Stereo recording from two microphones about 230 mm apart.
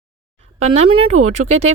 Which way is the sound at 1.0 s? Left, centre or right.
Right.